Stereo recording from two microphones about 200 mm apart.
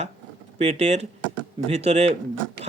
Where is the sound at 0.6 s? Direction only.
35° right (ahead or behind).